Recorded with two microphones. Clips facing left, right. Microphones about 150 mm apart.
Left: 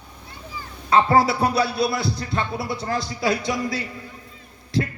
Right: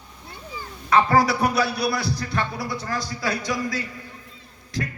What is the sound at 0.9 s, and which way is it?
A man's voice, 25° left (ahead or behind).